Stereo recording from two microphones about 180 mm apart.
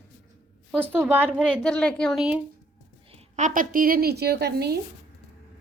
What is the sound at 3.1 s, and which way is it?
A woman's voice, 40° right (ahead or behind).